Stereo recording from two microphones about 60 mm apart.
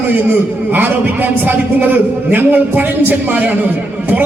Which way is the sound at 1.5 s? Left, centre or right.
Right.